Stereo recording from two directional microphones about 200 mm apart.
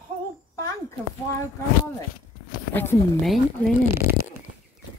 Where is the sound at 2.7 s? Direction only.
10° left (ahead or behind).